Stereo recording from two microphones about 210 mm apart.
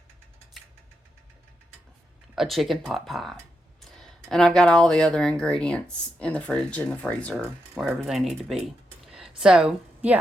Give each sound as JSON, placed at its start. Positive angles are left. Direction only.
{"t": 2.3, "sound": "speech", "side_deg": 0}